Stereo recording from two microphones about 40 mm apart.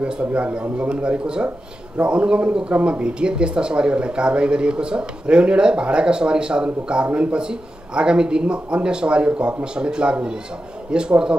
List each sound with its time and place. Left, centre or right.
0.0 s speech: right